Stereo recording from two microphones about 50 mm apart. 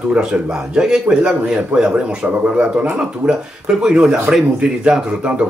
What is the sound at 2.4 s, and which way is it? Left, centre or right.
Speech, right.